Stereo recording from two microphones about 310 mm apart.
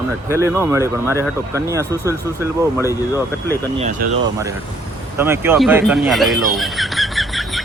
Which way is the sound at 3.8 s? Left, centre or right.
Right.